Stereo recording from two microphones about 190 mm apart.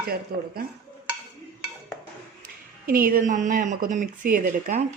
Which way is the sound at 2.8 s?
50° right (ahead or behind).